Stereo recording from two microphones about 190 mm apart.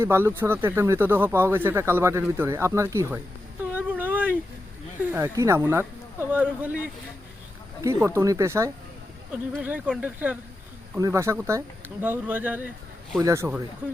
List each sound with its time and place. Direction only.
0.0 s speech: 10° right (ahead or behind)
3.7 s a sound: 10° right (ahead or behind)
5.1 s speech: 15° right (ahead or behind)
7.8 s speech: 15° right (ahead or behind)